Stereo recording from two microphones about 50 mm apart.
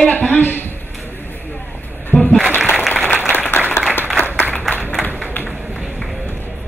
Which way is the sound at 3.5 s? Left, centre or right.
Left.